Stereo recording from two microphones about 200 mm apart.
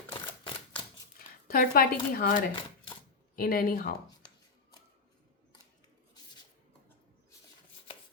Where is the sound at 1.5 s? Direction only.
45° left (ahead or behind).